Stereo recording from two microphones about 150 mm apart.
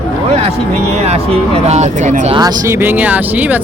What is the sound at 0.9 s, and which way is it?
Speech, 45° right (ahead or behind).